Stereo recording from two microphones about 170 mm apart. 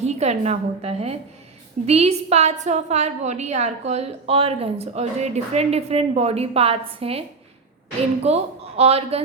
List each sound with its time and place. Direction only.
0.0 s a woman's voice: 40° right (ahead or behind)